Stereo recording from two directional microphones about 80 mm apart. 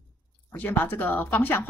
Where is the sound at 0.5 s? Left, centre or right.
Left.